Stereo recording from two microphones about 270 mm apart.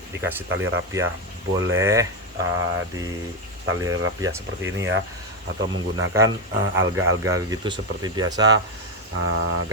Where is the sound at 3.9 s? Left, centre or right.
Right.